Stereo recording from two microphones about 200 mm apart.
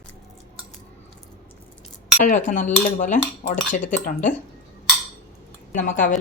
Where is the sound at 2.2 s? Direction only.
40° left (ahead or behind).